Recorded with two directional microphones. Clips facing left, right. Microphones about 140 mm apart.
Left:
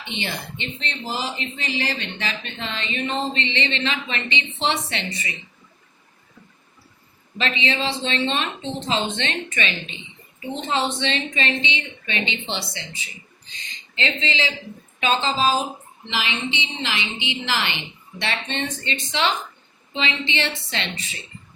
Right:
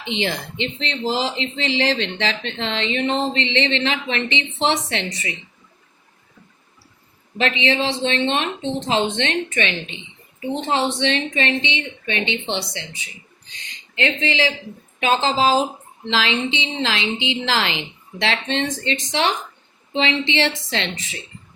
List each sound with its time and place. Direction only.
0.0 s speech: 90° right
7.3 s a woman's voice: 70° right (ahead or behind)
13.9 s a woman's voice: 60° right (ahead or behind)
15.0 s a woman's voice: 75° right (ahead or behind)